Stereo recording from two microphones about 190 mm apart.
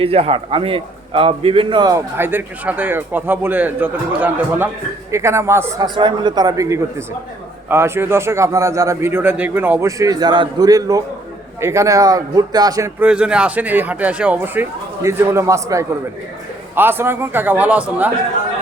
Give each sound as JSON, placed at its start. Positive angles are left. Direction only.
{"t": 0.0, "sound": "a man's voice", "side_deg": -30}
{"t": 13.1, "sound": "a man's voice", "side_deg": -5}